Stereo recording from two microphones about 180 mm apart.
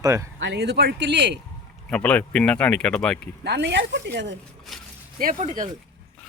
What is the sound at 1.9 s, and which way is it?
Speech, 5° left (ahead or behind).